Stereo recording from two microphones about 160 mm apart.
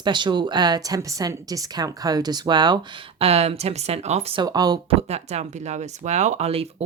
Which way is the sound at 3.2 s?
40° right (ahead or behind).